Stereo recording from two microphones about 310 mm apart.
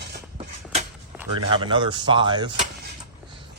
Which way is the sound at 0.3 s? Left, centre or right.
Right.